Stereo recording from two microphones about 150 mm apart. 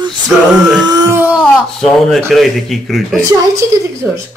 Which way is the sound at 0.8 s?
25° right (ahead or behind).